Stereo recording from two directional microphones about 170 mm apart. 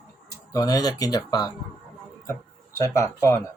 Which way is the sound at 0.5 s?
20° left (ahead or behind).